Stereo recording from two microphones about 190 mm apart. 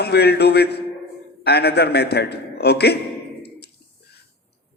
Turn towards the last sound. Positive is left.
turn(degrees=60)  # may be behind; listen again after turning